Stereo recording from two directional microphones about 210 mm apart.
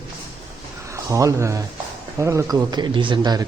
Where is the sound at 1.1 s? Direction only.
15° right (ahead or behind).